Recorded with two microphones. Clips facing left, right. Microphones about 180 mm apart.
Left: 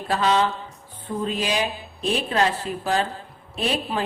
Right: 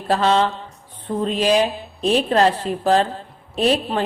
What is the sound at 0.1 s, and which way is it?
A woman's voice, 30° right (ahead or behind).